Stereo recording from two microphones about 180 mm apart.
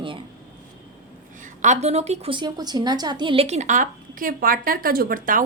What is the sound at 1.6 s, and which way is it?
A woman's voice, 40° right (ahead or behind).